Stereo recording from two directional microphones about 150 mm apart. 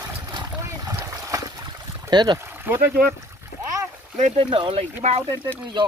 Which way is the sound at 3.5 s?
75° left (ahead or behind).